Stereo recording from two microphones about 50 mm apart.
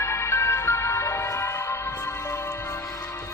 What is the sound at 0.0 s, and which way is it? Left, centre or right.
Music, left.